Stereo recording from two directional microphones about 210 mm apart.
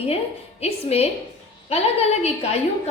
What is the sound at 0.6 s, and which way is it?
A woman's voice, 30° left (ahead or behind).